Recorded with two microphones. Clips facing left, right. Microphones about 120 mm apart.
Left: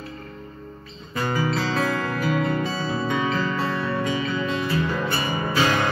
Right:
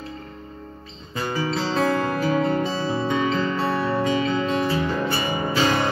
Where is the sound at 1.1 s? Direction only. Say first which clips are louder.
Left 1 dB; 45° left (ahead or behind).